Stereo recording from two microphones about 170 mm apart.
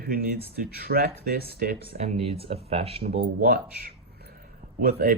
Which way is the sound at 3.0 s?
70° right (ahead or behind).